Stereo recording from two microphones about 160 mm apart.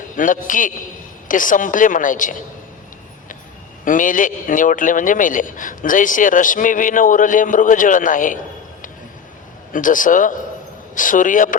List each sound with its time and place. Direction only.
0.2 s a man's voice: 55° left (ahead or behind)
3.8 s a man's voice: 55° left (ahead or behind)
9.7 s a man's voice: 55° left (ahead or behind)